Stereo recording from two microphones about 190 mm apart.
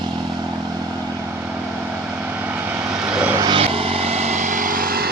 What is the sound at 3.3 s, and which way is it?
Vehicle, 25° right (ahead or behind).